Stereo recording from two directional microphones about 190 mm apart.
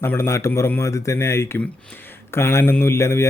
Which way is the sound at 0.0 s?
15° left (ahead or behind).